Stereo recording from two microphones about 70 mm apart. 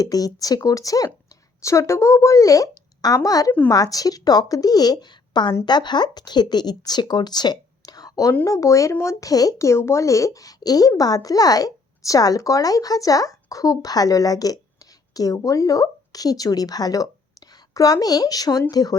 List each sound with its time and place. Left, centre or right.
0.0 s speech: left
8.4 s speech: left